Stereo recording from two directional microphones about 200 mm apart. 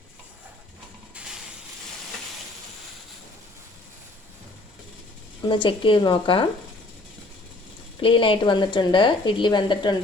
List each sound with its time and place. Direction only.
5.5 s speech: 25° left (ahead or behind)
8.0 s speech: 25° left (ahead or behind)